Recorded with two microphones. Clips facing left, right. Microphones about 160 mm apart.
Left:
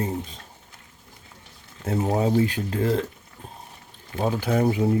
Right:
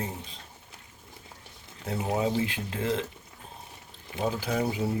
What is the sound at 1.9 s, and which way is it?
Speech, 40° left (ahead or behind).